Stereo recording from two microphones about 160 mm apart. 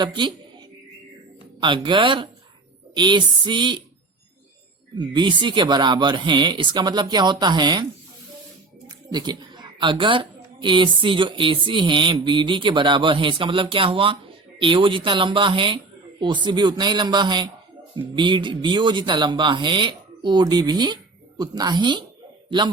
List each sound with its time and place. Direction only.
0.0 s speech: 30° right (ahead or behind)
1.6 s a woman's voice: 30° right (ahead or behind)
4.9 s speech: 30° right (ahead or behind)
9.1 s a woman's voice: 25° right (ahead or behind)